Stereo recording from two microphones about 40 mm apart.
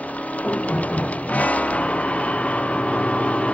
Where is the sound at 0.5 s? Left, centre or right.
Left.